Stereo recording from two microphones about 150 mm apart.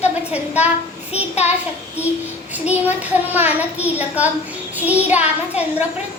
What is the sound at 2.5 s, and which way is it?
A child's voice, 10° right (ahead or behind).